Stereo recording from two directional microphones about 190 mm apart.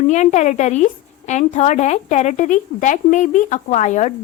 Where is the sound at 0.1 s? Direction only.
40° left (ahead or behind).